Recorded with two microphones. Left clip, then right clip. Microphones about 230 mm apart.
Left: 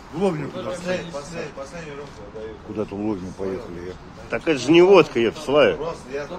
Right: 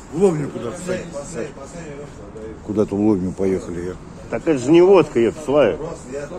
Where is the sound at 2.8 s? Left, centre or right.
Centre.